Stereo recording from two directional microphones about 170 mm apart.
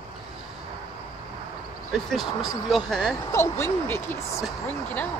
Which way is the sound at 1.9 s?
Centre (ahead or behind).